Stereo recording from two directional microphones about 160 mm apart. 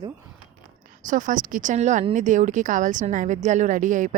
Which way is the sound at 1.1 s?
55° right (ahead or behind).